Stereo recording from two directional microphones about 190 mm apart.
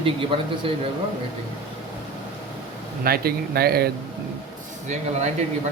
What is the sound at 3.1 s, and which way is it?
Speech, 55° right (ahead or behind).